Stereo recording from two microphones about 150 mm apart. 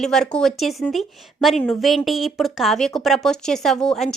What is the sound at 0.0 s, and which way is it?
A woman's voice, 5° left (ahead or behind).